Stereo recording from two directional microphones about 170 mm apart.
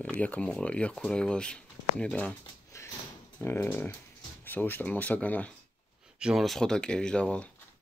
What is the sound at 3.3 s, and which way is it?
Speech, 10° left (ahead or behind).